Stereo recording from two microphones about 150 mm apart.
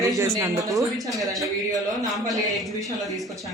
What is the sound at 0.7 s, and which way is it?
A man's voice, centre (ahead or behind).